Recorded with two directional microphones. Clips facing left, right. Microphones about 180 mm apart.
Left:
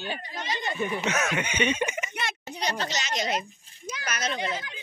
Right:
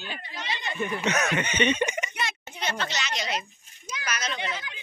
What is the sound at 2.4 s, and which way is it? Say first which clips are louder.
Speech: left 1 dB; 35° left (ahead or behind).